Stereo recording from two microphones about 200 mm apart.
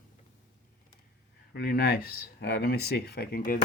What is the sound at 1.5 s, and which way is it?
Speech, 50° left (ahead or behind).